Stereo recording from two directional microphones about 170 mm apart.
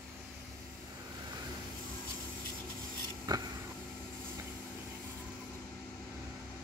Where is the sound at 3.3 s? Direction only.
25° right (ahead or behind).